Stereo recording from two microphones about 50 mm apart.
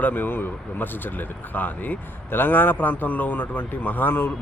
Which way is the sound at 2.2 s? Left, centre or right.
Left.